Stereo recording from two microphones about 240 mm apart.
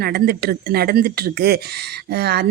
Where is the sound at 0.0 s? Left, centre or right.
Right.